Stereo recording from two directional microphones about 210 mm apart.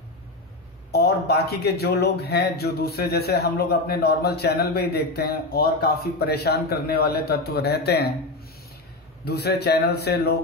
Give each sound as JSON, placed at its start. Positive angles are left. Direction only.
{"t": 0.9, "sound": "a man's voice", "side_deg": 50}
{"t": 9.2, "sound": "a man's voice", "side_deg": 50}